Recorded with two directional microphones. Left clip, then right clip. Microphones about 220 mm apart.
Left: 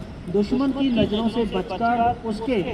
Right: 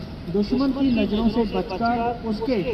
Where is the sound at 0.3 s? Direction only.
40° left (ahead or behind).